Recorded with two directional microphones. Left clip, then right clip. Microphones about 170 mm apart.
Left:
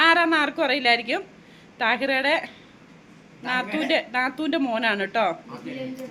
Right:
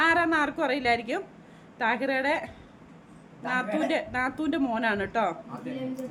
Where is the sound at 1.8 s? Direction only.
Centre (ahead or behind).